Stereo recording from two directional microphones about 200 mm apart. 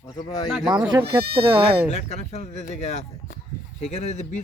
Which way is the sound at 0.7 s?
20° right (ahead or behind).